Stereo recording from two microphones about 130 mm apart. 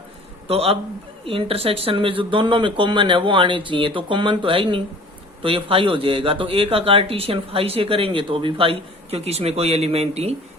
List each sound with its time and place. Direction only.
0.4 s a man's voice: 50° right (ahead or behind)